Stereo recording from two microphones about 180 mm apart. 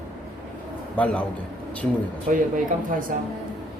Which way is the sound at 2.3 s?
50° right (ahead or behind).